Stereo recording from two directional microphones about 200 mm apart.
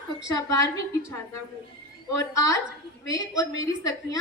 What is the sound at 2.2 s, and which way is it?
A woman's voice, 15° left (ahead or behind).